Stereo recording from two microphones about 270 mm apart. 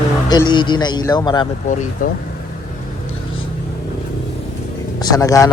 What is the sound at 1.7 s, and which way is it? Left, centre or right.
Speech, left.